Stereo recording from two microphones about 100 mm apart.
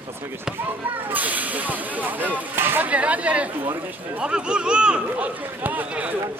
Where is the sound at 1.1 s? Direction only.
15° right (ahead or behind).